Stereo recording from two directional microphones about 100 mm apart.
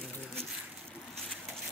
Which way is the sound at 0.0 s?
5° left (ahead or behind).